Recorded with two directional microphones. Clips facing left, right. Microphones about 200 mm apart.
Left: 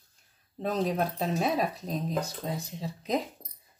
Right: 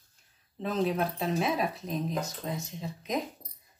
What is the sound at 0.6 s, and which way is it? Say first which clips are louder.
Speech: even; 40° left (ahead or behind).